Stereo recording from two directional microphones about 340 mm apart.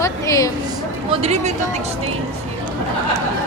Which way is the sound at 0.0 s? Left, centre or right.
Centre.